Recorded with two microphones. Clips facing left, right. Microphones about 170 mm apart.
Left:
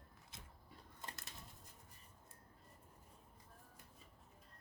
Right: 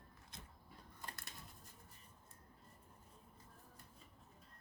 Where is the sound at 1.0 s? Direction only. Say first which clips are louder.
Even; 25° left (ahead or behind).